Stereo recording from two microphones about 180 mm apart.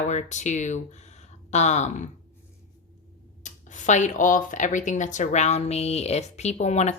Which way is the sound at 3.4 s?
40° left (ahead or behind).